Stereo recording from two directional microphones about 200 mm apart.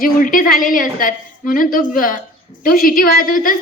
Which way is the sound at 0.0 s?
45° left (ahead or behind).